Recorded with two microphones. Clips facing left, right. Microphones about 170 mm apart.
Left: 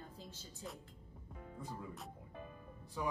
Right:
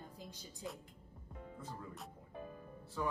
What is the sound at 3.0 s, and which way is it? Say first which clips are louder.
Speech: right 1 dB; 15° left (ahead or behind).